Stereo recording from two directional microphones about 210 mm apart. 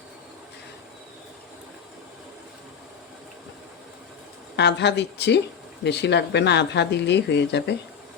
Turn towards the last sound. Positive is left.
turn(degrees=55)  # may be behind; listen again after turning